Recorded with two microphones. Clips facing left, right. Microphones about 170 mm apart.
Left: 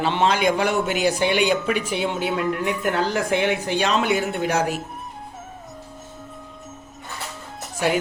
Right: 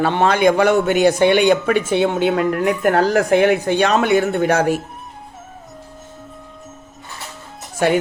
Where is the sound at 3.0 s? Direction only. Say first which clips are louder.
Right 8 dB; 45° right (ahead or behind); by 4.6 s 60° right (ahead or behind).